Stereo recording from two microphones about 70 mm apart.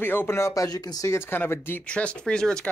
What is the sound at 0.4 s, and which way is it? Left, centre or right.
Speech, left.